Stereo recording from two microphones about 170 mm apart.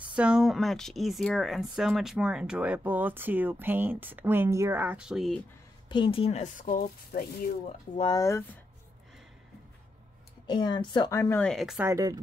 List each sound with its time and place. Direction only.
0.0 s speech: 5° right (ahead or behind)
5.9 s a woman's voice: 30° left (ahead or behind); by 7.2 s 55° left (ahead or behind)
7.9 s a woman's voice: 25° left (ahead or behind)
10.4 s a woman's voice: 25° left (ahead or behind)
11.1 s speech: 10° left (ahead or behind)
11.8 s speech: 20° right (ahead or behind)